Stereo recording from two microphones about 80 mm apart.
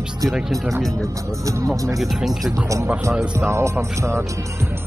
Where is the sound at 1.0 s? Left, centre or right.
Right.